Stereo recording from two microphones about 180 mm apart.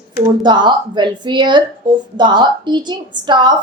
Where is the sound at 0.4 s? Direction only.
25° right (ahead or behind).